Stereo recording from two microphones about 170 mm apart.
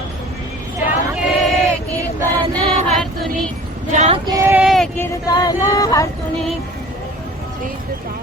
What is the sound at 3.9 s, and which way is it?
Female singing, 40° right (ahead or behind).